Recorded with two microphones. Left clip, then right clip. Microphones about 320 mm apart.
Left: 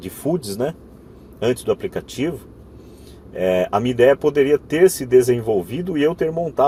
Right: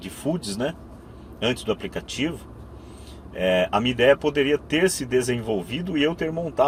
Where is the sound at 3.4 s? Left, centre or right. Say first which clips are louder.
Left 3 dB; left.